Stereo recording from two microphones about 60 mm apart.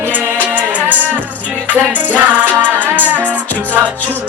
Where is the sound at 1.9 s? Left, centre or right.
Right.